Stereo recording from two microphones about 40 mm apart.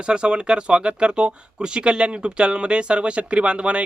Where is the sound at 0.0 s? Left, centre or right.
Right.